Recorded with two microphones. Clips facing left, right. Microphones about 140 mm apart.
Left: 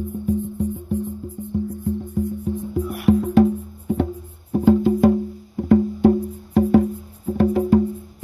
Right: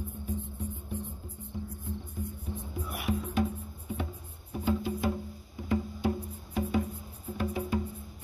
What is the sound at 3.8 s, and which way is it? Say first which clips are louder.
Music: left 15 dB; 60° left (ahead or behind).